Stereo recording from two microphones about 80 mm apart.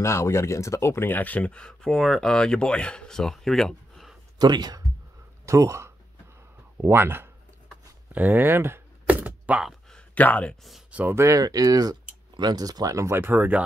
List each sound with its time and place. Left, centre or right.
0.0 s speech: left; by 4.2 s centre
4.4 s speech: right
5.4 s speech: right
8.1 s a sound: right
9.7 s a sound: centre
10.1 s speech: centre
10.9 s speech: centre
11.1 s speech: right
11.4 s speech: right
13.1 s speech: right